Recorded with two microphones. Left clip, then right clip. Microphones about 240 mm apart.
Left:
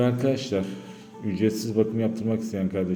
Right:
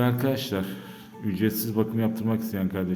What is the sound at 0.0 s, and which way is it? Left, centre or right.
A man's voice, centre.